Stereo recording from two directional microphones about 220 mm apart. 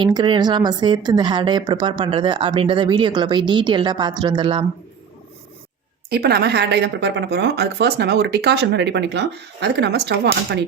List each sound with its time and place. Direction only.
0.0 s a woman's voice: 20° right (ahead or behind)
6.1 s speech: 45° right (ahead or behind)